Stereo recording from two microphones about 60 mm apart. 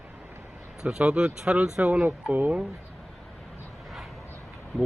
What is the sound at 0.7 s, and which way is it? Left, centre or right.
Speech, centre.